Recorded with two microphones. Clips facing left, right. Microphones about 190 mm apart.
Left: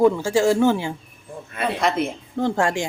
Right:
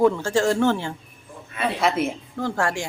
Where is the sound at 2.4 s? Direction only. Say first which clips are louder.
Left 4 dB; 20° left (ahead or behind).